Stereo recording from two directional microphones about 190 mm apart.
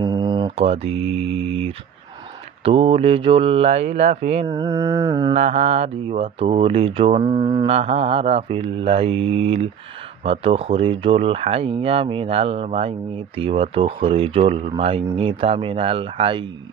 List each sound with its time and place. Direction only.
0.0 s mantra: 20° right (ahead or behind)
2.6 s speech: 30° right (ahead or behind)
4.5 s speech: 20° right (ahead or behind)
5.3 s speech: 35° right (ahead or behind)